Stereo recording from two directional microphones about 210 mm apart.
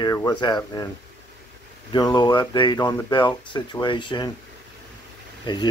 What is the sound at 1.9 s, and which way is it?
Speech, 20° left (ahead or behind).